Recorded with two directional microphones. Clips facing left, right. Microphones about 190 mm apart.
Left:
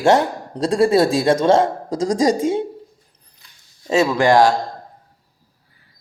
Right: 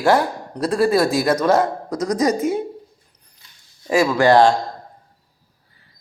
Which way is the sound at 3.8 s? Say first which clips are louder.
Even; 25° left (ahead or behind).